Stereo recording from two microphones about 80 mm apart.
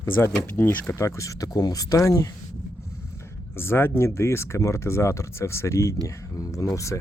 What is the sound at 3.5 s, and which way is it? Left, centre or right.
Speech, left.